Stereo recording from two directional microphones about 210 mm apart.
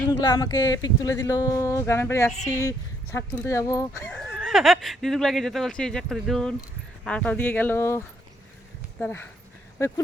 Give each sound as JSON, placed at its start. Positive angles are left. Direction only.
{"t": 0.1, "sound": "speech", "side_deg": 15}
{"t": 4.0, "sound": "speech", "side_deg": 5}